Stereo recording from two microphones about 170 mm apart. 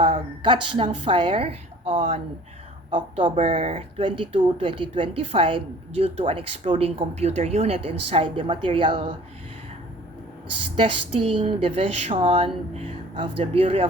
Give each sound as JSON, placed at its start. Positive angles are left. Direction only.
{"t": 0.0, "sound": "a woman's voice", "side_deg": -30}
{"t": 10.8, "sound": "speech", "side_deg": -30}